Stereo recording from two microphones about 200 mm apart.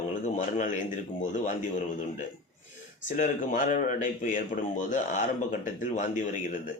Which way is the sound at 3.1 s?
40° left (ahead or behind).